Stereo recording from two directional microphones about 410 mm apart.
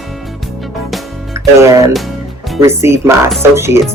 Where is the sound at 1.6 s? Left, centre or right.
Centre.